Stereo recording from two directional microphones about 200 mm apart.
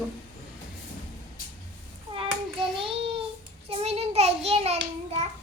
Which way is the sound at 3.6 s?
30° right (ahead or behind).